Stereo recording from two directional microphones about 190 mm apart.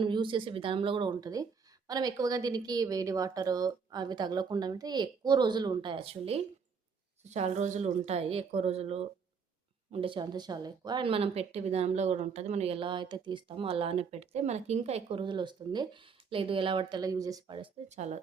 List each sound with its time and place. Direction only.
0.0 s speech: 25° right (ahead or behind)